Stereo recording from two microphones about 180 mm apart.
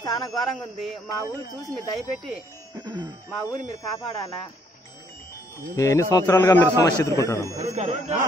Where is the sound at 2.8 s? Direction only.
25° right (ahead or behind).